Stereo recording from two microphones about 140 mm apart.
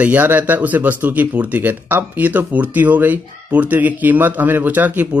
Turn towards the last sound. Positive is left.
turn(degrees=-10)  # may be behind; listen again after turning